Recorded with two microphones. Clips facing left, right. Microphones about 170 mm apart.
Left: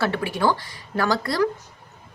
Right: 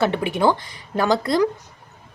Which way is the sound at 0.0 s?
20° right (ahead or behind).